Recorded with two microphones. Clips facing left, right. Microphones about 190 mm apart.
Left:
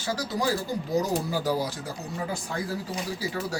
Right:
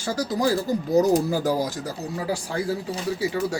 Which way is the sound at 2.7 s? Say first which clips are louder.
Right 5 dB; 25° right (ahead or behind).